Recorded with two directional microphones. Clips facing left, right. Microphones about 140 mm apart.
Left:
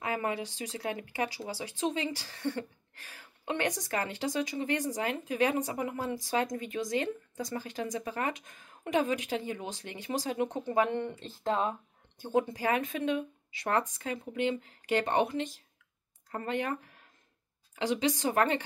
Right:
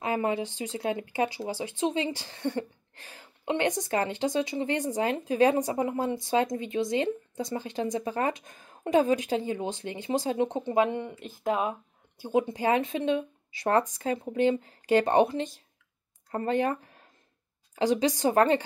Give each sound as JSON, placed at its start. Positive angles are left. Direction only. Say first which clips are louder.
{"t": 0.0, "sound": "speech", "louder": "right 5 dB", "side_deg": -25}